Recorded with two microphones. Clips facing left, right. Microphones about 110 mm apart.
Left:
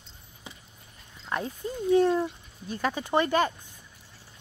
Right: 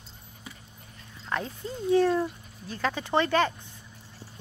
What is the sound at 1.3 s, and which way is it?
Speech, 15° left (ahead or behind).